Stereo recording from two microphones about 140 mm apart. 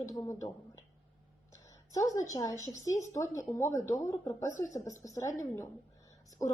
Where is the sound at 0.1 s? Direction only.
25° left (ahead or behind).